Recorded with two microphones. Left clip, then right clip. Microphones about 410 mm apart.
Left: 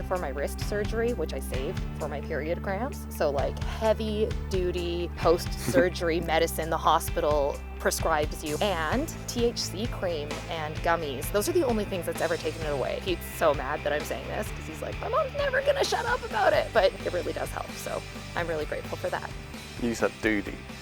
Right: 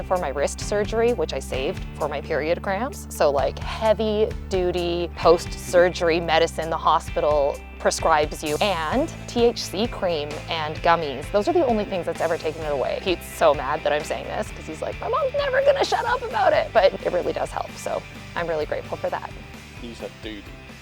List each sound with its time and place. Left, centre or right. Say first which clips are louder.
0.1 s speech: right 8 dB; right
11.3 s speech: right 6 dB; right
19.9 s speech: left 9 dB; left